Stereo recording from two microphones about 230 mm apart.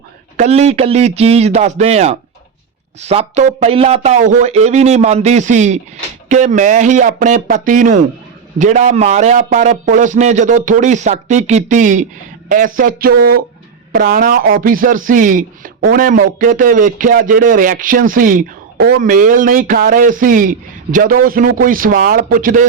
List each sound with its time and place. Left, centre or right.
0.3 s speech: right